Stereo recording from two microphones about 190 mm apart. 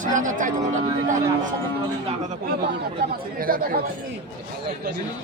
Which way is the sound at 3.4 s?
50° right (ahead or behind).